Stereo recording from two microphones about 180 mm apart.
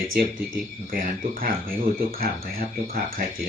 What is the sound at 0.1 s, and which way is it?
Speech, 50° right (ahead or behind).